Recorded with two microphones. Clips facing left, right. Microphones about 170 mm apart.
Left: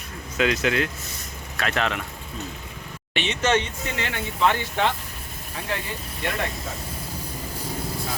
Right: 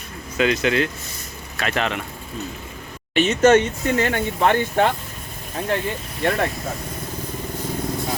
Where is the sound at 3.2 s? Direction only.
45° right (ahead or behind).